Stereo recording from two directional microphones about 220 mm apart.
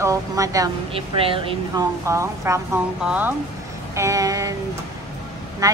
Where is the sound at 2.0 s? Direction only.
15° right (ahead or behind).